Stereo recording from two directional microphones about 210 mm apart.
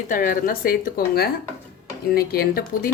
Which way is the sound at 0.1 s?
40° left (ahead or behind).